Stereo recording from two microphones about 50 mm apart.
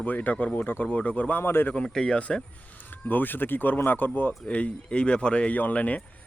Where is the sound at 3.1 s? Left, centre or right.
Left.